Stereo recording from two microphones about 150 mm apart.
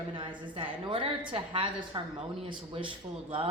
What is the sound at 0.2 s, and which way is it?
A woman's voice, 35° right (ahead or behind).